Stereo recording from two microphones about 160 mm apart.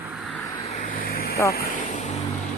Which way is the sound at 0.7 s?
60° left (ahead or behind).